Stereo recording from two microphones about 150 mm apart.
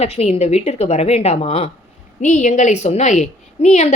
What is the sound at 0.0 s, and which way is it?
Speech, 45° left (ahead or behind).